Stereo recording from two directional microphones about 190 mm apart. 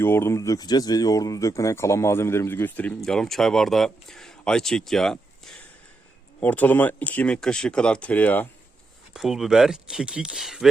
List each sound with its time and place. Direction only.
0.0 s speech: 10° left (ahead or behind)
9.1 s speech: centre (ahead or behind)